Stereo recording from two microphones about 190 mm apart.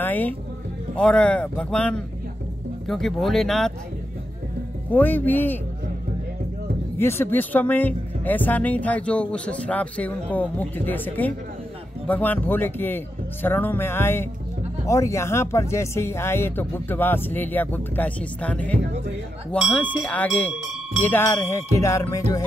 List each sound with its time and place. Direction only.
0.0 s speech: 10° left (ahead or behind)
4.9 s speech: 10° left (ahead or behind)
7.0 s speech: 10° left (ahead or behind)